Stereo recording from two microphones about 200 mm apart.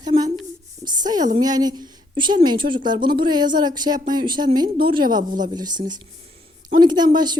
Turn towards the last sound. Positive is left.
turn(degrees=-20)  # may be behind; listen again after turning